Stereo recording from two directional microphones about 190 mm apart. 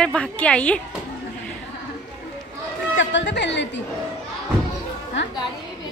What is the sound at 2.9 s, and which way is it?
Speech, 70° left (ahead or behind).